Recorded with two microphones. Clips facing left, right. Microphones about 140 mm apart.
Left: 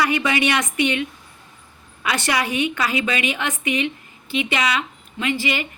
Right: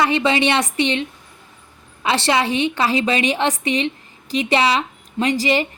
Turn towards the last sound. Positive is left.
turn(degrees=-35)  # may be behind; listen again after turning